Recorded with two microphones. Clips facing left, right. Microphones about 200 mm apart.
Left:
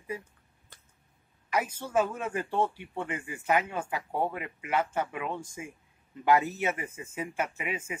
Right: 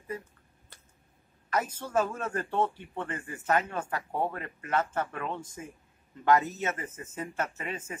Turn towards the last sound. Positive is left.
turn(degrees=10)  # may be behind; listen again after turning